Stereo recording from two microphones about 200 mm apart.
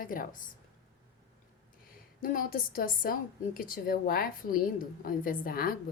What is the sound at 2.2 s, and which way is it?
Speech, 45° left (ahead or behind).